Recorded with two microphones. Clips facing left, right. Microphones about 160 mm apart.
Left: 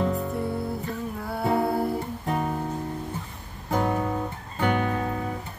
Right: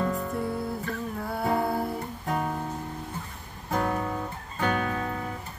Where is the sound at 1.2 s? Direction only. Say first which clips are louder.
Left 2 dB; centre (ahead or behind).